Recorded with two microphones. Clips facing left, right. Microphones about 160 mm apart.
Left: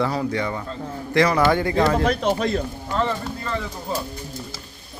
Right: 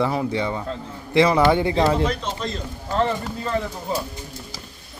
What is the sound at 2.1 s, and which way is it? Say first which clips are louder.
Speech: left 6 dB; 60° left (ahead or behind).